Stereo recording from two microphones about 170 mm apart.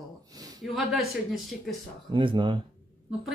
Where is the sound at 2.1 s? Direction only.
30° right (ahead or behind).